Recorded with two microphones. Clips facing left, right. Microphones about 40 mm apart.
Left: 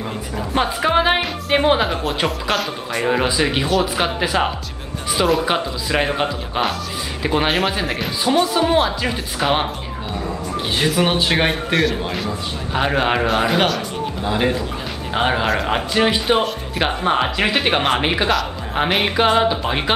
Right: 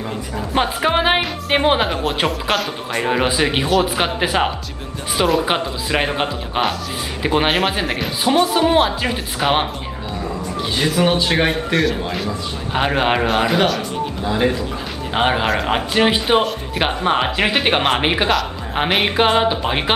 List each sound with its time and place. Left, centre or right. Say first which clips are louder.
0.6 s a man's voice: even; centre
4.2 s speech: right 1 dB; centre
10.8 s a man's voice: right 1 dB; centre
12.7 s speech: right 1 dB; centre
14.2 s speech: right 1 dB; centre
15.1 s speech: right 1 dB; centre
15.4 s a man's voice: right 1 dB; centre